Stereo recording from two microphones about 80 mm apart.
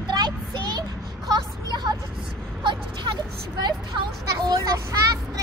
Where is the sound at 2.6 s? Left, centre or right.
Right.